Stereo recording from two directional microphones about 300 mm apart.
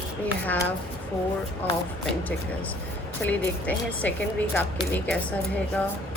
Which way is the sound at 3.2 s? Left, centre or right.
Centre.